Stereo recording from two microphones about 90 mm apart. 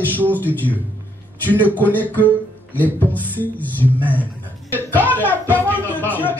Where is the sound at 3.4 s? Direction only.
20° left (ahead or behind).